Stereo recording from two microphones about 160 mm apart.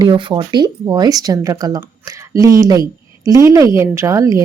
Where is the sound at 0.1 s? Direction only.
30° right (ahead or behind).